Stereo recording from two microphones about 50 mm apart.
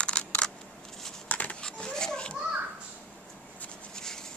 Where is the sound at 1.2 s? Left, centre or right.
Left.